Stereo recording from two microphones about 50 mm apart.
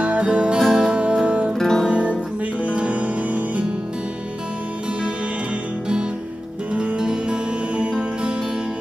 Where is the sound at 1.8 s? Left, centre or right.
Right.